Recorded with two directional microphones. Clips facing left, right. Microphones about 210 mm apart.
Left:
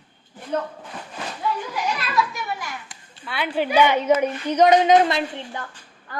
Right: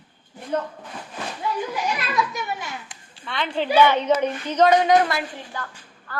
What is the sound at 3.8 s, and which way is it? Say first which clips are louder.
A woman's voice: even; 10° left (ahead or behind).